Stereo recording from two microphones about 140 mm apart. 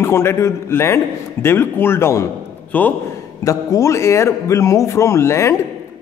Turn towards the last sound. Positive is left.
turn(degrees=20)  # may be behind; listen again after turning